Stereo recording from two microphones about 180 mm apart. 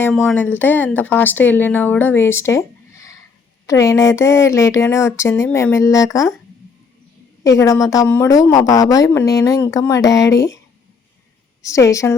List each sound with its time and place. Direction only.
0.3 s speech: 10° left (ahead or behind)
7.4 s a woman's voice: 20° left (ahead or behind)
11.6 s speech: 15° left (ahead or behind)